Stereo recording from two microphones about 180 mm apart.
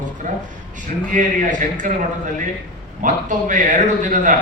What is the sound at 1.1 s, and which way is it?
Speech, 45° right (ahead or behind).